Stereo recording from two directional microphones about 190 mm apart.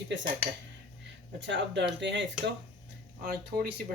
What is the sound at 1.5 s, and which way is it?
Speech, 65° right (ahead or behind).